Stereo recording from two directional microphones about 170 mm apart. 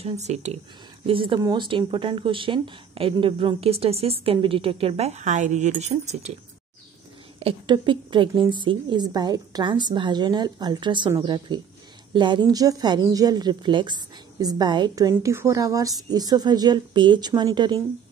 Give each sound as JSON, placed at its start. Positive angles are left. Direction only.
{"t": 0.0, "sound": "a woman's voice", "side_deg": -40}
{"t": 1.0, "sound": "a woman's voice", "side_deg": -30}
{"t": 7.3, "sound": "a woman's voice", "side_deg": -30}